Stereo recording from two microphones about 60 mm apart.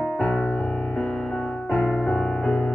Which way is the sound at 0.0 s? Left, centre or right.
Left.